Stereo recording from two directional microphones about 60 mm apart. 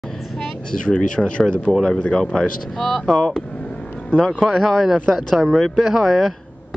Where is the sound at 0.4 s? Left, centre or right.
Centre.